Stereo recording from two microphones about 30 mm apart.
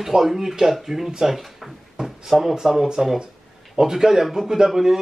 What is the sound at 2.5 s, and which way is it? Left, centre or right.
A man's voice, centre.